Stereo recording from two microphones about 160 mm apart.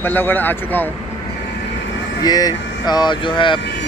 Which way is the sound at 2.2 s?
25° left (ahead or behind).